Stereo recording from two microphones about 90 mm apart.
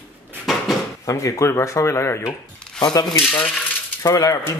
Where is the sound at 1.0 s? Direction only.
35° left (ahead or behind).